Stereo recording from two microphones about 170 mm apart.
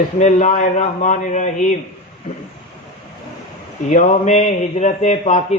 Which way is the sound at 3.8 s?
45° left (ahead or behind).